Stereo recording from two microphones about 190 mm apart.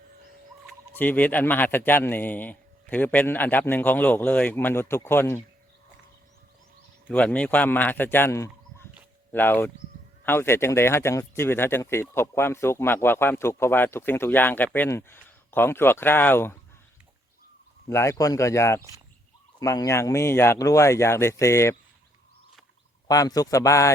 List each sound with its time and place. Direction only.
0.9 s speech: 10° left (ahead or behind)
7.1 s speech: 5° left (ahead or behind)
17.8 s speech: 15° left (ahead or behind)
23.0 s speech: 20° left (ahead or behind)